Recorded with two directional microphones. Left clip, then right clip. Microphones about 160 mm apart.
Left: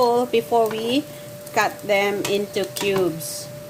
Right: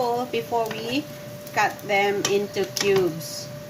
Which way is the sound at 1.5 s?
80° left.